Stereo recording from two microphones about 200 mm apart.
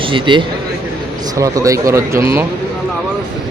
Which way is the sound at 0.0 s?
25° right (ahead or behind).